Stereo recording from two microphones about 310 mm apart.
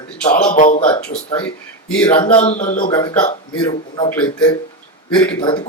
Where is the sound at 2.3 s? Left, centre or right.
Left.